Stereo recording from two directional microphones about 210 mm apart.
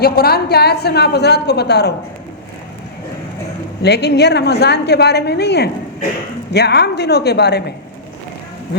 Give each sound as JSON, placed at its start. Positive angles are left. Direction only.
{"t": 0.0, "sound": "a woman's voice", "side_deg": 45}
{"t": 3.8, "sound": "a woman's voice", "side_deg": 50}